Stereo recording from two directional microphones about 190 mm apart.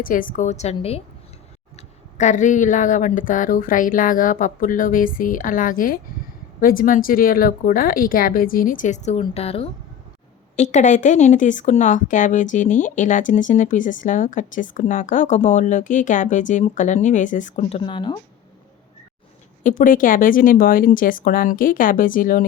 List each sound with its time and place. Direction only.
0.0 s speech: 45° left (ahead or behind); by 18.2 s 25° left (ahead or behind)
19.6 s speech: 45° left (ahead or behind)